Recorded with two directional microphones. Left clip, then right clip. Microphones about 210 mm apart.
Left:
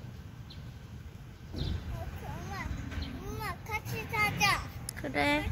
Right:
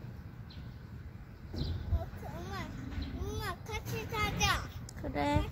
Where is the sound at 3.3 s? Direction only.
40° right (ahead or behind).